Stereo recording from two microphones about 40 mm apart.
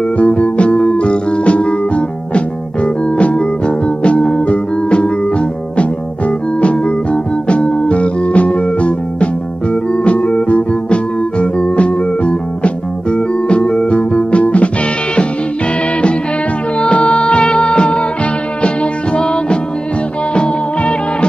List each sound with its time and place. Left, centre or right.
0.2 s music: left
16.8 s music of bollywood: left
18.6 s music: left